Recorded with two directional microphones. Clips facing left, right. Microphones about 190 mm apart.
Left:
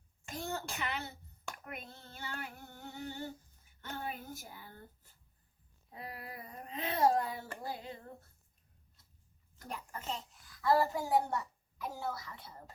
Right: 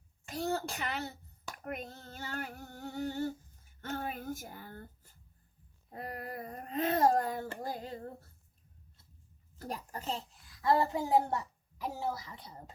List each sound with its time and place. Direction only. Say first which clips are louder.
0.3 s a child's voice: right 5 dB; 40° right (ahead or behind)
1.6 s child singing: right 7 dB; 40° right (ahead or behind)
5.9 s a child's voice: right 5 dB; 45° right (ahead or behind)
9.6 s a child's voice: right 4 dB; 35° right (ahead or behind)
10.6 s a woman's voice: right 1 dB; 20° right (ahead or behind)